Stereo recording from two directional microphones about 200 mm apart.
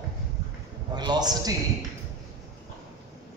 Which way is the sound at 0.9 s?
20° right (ahead or behind).